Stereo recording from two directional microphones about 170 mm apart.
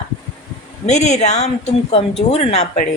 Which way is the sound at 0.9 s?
40° left (ahead or behind).